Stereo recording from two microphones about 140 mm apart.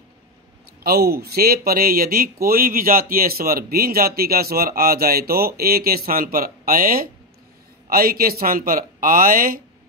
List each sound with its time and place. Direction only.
0.8 s speech: 90° right